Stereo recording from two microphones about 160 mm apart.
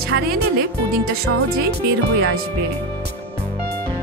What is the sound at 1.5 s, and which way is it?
Speech, 90° right.